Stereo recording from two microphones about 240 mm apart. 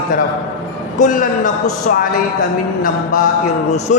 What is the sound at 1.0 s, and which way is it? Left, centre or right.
Speech, left.